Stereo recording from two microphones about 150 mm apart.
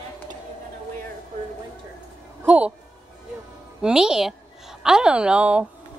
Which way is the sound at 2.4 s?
10° right (ahead or behind).